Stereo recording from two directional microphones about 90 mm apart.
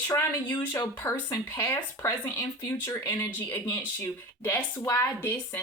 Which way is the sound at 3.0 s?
35° left (ahead or behind).